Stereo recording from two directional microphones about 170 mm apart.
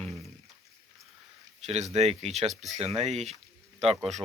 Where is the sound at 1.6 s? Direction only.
40° right (ahead or behind).